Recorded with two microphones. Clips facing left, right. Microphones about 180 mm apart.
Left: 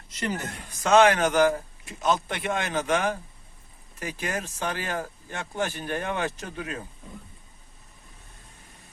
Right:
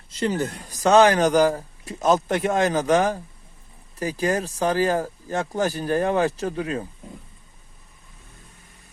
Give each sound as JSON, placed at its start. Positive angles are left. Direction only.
{"t": 0.1, "sound": "speech", "side_deg": -30}